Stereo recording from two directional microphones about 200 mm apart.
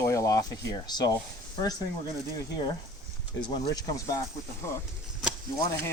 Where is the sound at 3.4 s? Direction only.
20° left (ahead or behind).